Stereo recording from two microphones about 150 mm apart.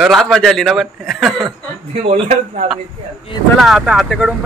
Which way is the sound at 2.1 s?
50° right (ahead or behind).